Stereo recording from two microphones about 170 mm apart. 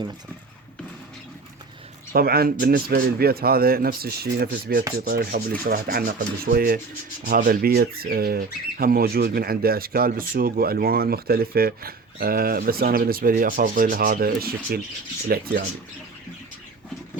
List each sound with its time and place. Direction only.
2.1 s speech: 65° right (ahead or behind)